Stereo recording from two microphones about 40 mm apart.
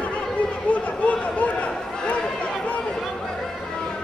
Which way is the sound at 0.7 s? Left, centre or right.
Left.